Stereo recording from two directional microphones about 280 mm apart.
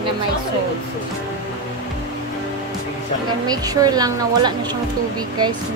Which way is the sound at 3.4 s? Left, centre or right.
Centre.